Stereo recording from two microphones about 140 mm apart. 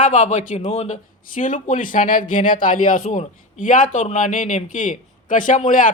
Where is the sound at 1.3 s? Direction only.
70° left (ahead or behind).